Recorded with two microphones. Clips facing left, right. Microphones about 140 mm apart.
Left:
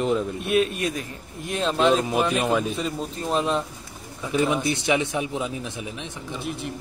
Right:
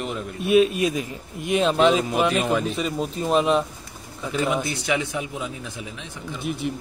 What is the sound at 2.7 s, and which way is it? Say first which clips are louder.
Speech: right 3 dB; 5° right (ahead or behind).